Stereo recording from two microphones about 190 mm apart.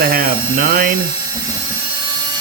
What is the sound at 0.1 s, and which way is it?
Electric toothbrush, 50° right (ahead or behind).